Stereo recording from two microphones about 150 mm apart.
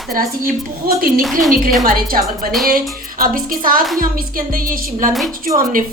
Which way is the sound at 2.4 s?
80° right.